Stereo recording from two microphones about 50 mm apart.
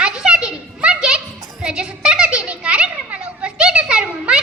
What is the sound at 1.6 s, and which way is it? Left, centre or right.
Children playing, centre.